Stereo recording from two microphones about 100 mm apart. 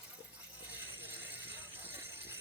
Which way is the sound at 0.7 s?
20° right (ahead or behind).